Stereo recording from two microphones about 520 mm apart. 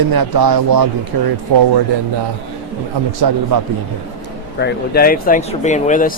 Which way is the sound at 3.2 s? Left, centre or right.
Right.